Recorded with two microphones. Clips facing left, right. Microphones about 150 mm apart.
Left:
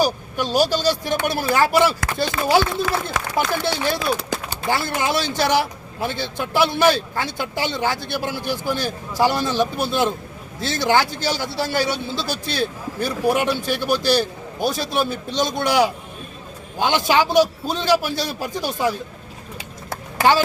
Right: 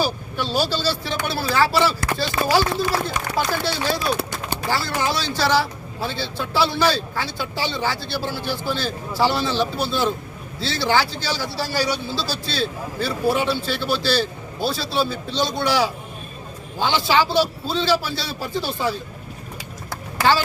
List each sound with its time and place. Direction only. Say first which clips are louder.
0.0 s a man's voice: left 3 dB; 15° left (ahead or behind)